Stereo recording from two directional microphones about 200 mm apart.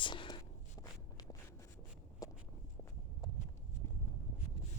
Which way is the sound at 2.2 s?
15° left (ahead or behind).